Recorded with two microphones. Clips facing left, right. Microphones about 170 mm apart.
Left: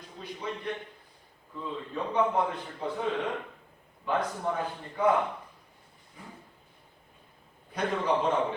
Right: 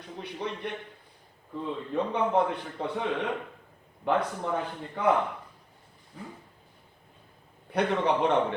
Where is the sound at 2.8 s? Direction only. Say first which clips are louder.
Even; 65° right (ahead or behind).